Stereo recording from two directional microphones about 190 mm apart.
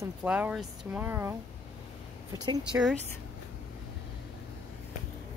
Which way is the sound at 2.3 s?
20° right (ahead or behind).